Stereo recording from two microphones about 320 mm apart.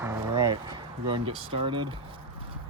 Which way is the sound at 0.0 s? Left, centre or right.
Centre.